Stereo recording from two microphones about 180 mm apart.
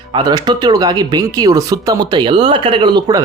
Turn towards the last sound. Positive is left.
turn(degrees=-20)  # may be behind; listen again after turning